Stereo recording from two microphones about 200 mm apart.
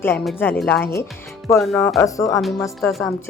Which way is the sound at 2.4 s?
Centre (ahead or behind).